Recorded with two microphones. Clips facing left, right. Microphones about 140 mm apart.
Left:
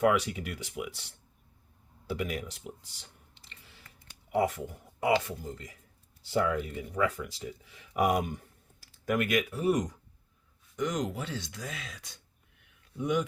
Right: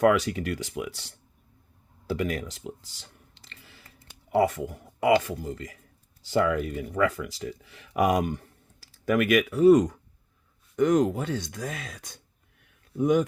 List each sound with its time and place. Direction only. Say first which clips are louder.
0.0 s speech: right 5 dB; 90° right
2.1 s a sound: right 5 dB; 90° right
4.3 s speech: right 5 dB; 90° right; by 10.0 s 65° right (ahead or behind)
10.8 s speech: right 10 dB; 55° right (ahead or behind)